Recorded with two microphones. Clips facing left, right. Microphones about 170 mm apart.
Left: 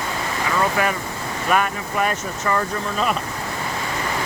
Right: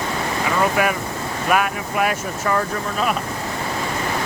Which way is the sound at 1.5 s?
5° right (ahead or behind).